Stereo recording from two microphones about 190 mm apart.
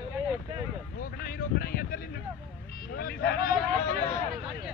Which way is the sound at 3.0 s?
55° left (ahead or behind).